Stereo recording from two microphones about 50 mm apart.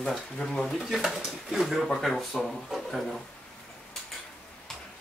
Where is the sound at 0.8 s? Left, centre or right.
Centre.